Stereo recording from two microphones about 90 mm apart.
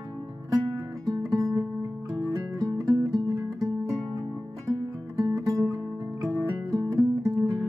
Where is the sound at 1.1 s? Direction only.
40° right (ahead or behind).